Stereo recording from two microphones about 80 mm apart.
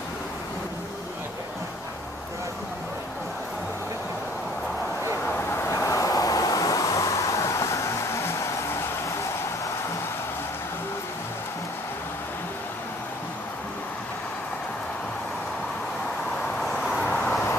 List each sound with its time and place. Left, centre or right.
5.5 s vehicle: left
16.6 s vehicle: centre
17.0 s vehicle: centre